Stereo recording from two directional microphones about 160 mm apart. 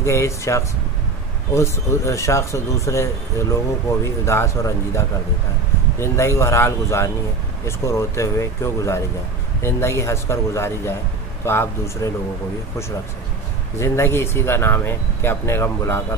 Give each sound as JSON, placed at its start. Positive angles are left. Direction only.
{"t": 0.0, "sound": "speech", "side_deg": 15}
{"t": 13.7, "sound": "speech", "side_deg": 15}